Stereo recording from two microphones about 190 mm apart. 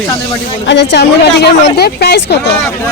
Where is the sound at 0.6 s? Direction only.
65° left (ahead or behind).